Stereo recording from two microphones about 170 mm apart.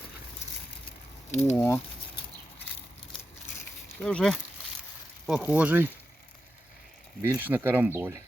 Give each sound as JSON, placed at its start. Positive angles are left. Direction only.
{"t": 1.3, "sound": "speech", "side_deg": 40}
{"t": 1.5, "sound": "speech", "side_deg": 15}
{"t": 3.8, "sound": "speech", "side_deg": 5}
{"t": 7.3, "sound": "speech", "side_deg": -10}